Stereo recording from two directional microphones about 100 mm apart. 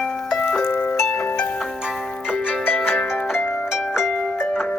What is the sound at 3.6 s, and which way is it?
Harp, 5° right (ahead or behind).